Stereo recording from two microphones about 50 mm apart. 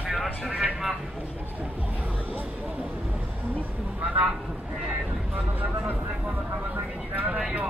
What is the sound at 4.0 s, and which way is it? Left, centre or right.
Speech, right.